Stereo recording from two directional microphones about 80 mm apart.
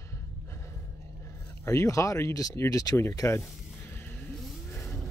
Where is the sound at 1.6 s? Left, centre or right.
Left.